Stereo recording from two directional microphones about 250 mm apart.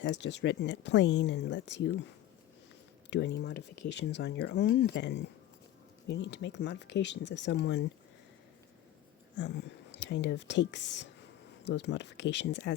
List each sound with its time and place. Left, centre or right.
0.0 s speech: left
3.1 s speech: left
9.3 s speech: left